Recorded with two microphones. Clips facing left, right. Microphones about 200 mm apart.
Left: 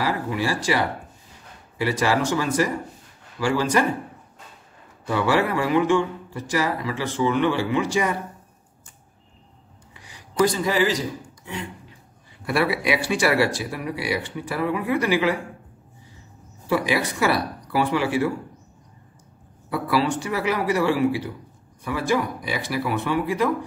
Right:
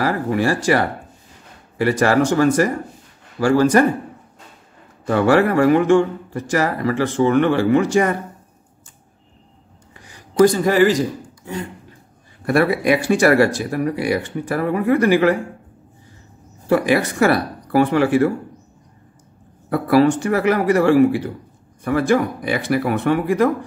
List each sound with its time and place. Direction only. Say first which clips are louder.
0.0 s a man's voice: right 6 dB; 50° right (ahead or behind)
5.0 s a man's voice: right 6 dB; 50° right (ahead or behind)
9.9 s a man's voice: right 7 dB; 50° right (ahead or behind)
16.6 s a man's voice: right 6 dB; 50° right (ahead or behind)
19.7 s a man's voice: right 8 dB; 50° right (ahead or behind)